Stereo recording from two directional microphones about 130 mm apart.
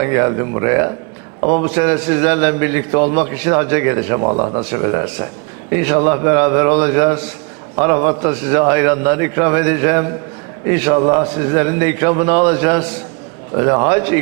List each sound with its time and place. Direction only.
0.0 s a man's voice: 25° right (ahead or behind)